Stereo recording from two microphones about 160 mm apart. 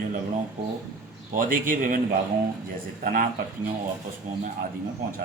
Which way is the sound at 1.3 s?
55° right (ahead or behind).